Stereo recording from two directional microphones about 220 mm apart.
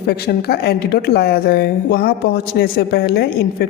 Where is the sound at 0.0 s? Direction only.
45° left (ahead or behind).